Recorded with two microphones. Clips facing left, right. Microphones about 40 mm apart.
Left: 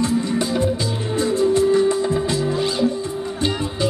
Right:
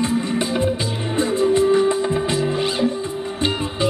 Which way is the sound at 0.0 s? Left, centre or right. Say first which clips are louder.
Even; right.